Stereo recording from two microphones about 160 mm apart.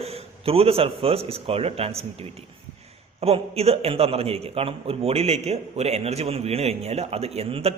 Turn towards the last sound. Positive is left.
turn(degrees=-40)  # may be behind; listen again after turning